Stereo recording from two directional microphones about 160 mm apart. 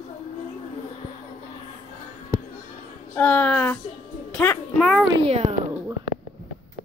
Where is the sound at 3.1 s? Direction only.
10° left (ahead or behind).